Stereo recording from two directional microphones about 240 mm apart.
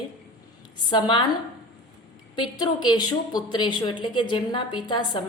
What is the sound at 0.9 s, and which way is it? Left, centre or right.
Speech, centre.